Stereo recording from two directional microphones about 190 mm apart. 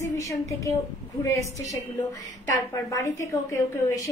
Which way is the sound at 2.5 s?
20° left (ahead or behind).